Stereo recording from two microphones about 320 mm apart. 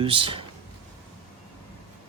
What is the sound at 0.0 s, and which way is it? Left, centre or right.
Speech, centre.